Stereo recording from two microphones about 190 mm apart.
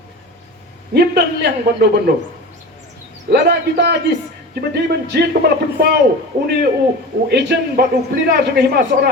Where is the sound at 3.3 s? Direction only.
60° right (ahead or behind).